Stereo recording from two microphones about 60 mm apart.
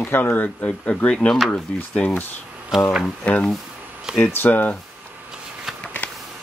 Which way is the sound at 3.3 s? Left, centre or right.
Left.